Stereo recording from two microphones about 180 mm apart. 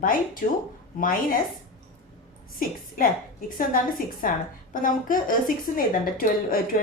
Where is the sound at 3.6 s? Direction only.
50° left (ahead or behind).